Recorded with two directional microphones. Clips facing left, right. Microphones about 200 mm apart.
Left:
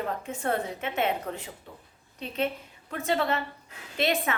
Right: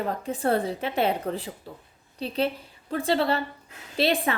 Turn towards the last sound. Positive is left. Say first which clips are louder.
# right 3 dB
turn(degrees=-30)  # may be behind; listen again after turning